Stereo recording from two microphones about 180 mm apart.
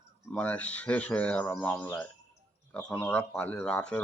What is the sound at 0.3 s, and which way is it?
Speech, 5° left (ahead or behind).